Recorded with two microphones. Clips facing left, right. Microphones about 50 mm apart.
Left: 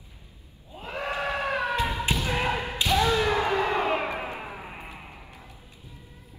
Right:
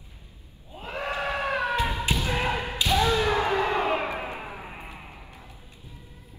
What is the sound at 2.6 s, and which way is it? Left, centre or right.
Thump, left.